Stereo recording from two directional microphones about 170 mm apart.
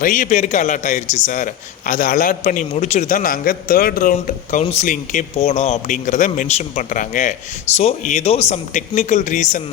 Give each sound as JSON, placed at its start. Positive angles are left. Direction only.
{"t": 0.0, "sound": "speech", "side_deg": 50}
{"t": 4.6, "sound": "speech", "side_deg": 40}